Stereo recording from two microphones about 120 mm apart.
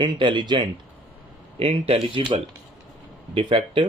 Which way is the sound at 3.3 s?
50° right (ahead or behind).